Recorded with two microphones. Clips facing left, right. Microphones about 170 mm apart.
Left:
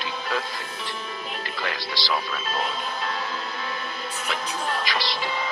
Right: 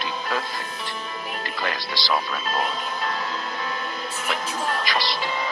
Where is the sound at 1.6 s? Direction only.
45° right (ahead or behind).